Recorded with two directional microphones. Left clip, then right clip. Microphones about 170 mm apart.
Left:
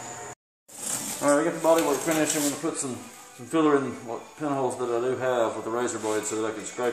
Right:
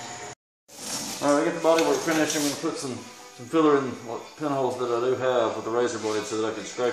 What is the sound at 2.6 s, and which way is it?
Speech, 25° left (ahead or behind).